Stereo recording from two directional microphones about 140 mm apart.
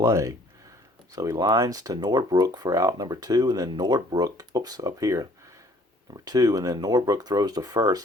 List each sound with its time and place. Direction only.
0.0 s speech: 20° right (ahead or behind)